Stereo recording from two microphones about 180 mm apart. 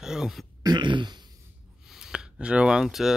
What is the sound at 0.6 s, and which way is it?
Throat clearing, 25° right (ahead or behind).